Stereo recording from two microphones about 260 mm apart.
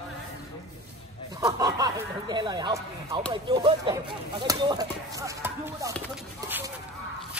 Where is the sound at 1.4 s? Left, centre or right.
Centre.